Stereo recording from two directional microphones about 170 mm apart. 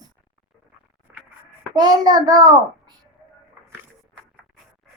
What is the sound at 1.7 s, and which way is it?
Child singing, 25° right (ahead or behind).